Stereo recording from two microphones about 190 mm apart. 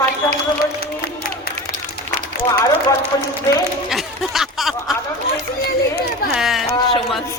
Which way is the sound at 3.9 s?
Centre (ahead or behind).